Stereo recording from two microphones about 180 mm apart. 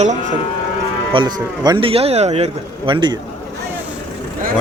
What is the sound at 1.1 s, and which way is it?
Speech, 25° right (ahead or behind).